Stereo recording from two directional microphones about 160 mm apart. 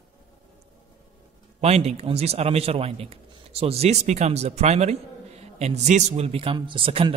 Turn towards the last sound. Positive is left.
turn(degrees=-35)  # may be behind; listen again after turning